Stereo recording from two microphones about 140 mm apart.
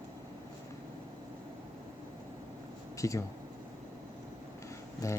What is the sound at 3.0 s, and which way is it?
Speech, 20° left (ahead or behind).